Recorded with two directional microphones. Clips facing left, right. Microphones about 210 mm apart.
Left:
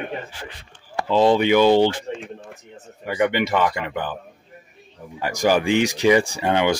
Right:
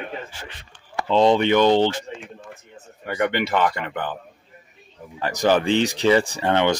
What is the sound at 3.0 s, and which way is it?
Speech, 15° left (ahead or behind).